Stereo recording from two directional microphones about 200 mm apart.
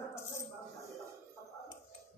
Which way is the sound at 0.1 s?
15° left (ahead or behind).